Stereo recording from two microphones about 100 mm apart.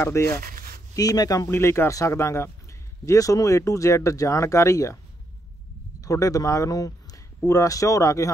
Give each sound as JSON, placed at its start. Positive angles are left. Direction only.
{"t": 0.0, "sound": "speech", "side_deg": 30}
{"t": 0.9, "sound": "speech", "side_deg": 40}
{"t": 1.5, "sound": "speech", "side_deg": 25}
{"t": 5.9, "sound": "a man's voice", "side_deg": 35}